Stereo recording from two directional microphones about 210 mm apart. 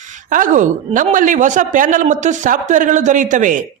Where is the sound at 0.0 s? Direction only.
40° right (ahead or behind).